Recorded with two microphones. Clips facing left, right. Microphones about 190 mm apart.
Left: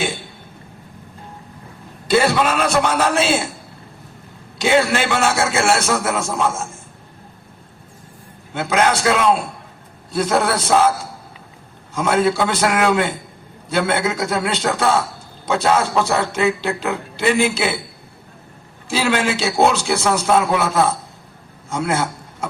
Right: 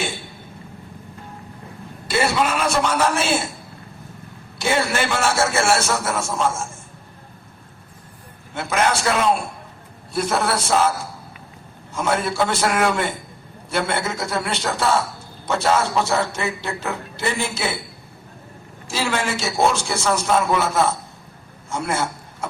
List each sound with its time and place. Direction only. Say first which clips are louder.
2.0 s a man's voice: left 4 dB; 60° left (ahead or behind)
4.6 s a man's voice: left 4 dB; 65° left (ahead or behind)
8.5 s a man's voice: left 3 dB; 60° left (ahead or behind)
12.0 s a man's voice: left 4 dB; 60° left (ahead or behind)
18.9 s a man's voice: left 5 dB; 65° left (ahead or behind)